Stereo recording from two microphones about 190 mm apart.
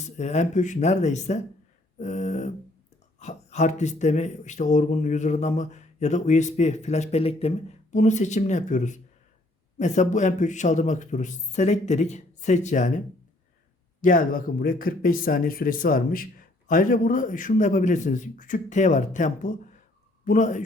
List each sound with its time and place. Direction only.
0.0 s speech: 35° left (ahead or behind)
14.0 s a man's voice: 45° left (ahead or behind)